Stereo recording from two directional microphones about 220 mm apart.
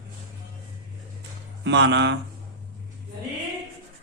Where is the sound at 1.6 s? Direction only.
55° right (ahead or behind).